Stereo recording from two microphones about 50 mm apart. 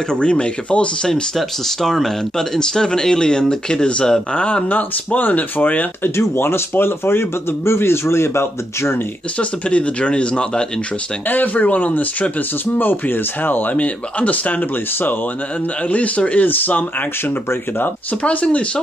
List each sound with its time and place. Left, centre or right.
0.1 s speech: left
1.3 s speech: centre; by 5.9 s left
6.0 s a man's voice: left
9.4 s speech: left
11.2 s speech: left
13.7 s speech: left
18.2 s speech: left